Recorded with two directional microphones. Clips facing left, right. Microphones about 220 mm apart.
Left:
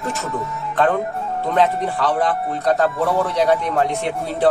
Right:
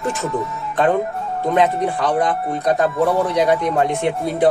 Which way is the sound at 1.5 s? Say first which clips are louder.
Right 1 dB; 15° right (ahead or behind).